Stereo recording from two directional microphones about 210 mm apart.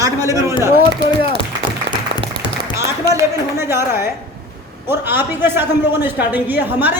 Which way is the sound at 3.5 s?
10° right (ahead or behind).